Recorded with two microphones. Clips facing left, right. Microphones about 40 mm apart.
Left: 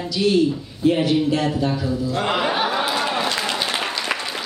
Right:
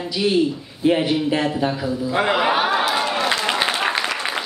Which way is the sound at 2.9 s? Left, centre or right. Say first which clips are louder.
Right 1 dB; centre.